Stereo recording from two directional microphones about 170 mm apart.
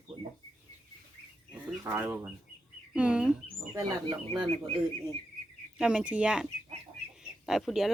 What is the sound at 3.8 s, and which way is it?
Speech, 25° right (ahead or behind).